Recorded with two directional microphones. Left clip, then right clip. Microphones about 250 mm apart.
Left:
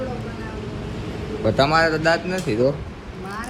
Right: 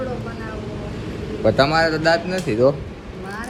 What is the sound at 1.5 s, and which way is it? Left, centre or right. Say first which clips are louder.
Speech: right 1 dB; centre.